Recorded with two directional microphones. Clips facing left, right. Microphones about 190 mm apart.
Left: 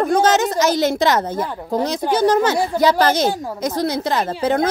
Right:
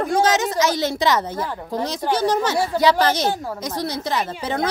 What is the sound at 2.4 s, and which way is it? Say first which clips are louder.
Speech: left 2 dB; 50° left (ahead or behind).